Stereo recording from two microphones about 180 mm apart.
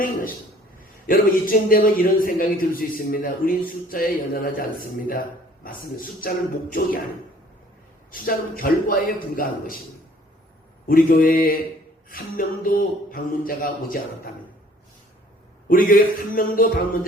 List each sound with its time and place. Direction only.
0.8 s a man's voice: 50° left (ahead or behind)
8.1 s a man's voice: 50° left (ahead or behind)
10.8 s a man's voice: 50° left (ahead or behind)
15.7 s a man's voice: 50° left (ahead or behind)